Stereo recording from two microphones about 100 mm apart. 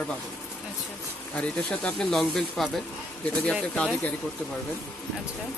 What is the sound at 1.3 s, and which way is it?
Speech, 10° left (ahead or behind).